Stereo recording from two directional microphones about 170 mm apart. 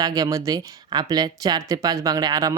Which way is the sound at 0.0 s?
20° right (ahead or behind).